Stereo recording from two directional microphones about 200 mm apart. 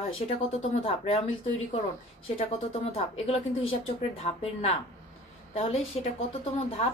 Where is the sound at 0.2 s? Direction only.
35° left (ahead or behind).